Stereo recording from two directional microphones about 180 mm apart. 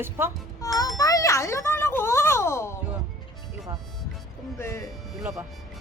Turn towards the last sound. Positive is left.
turn(degrees=0)  # may be behind; listen again after turning